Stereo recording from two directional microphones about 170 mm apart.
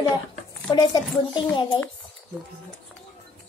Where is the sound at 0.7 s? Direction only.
25° left (ahead or behind).